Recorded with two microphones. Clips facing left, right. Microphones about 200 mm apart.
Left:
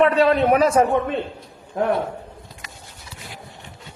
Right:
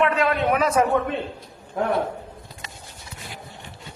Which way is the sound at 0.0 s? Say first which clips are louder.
Left 5 dB; 35° left (ahead or behind).